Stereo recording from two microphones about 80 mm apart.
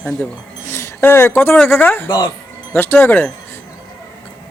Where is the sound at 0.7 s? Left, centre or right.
Left.